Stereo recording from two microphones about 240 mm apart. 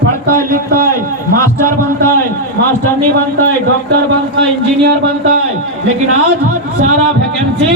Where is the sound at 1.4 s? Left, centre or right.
Centre.